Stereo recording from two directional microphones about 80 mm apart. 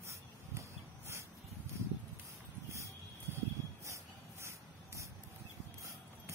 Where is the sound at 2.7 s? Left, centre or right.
Right.